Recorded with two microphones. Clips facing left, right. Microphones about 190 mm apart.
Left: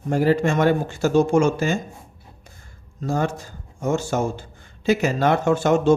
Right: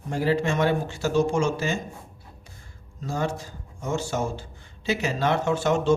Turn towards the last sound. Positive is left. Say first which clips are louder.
# left 5 dB
turn(degrees=50)  # may be behind; listen again after turning